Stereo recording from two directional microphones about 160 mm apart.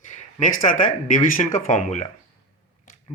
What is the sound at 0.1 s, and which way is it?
Speech, 50° left (ahead or behind).